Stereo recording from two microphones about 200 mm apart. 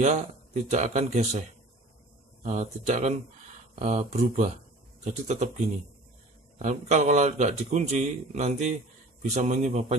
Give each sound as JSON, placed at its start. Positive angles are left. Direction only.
{"t": 0.0, "sound": "a man's voice", "side_deg": -35}
{"t": 2.4, "sound": "a man's voice", "side_deg": -35}
{"t": 6.6, "sound": "a man's voice", "side_deg": -35}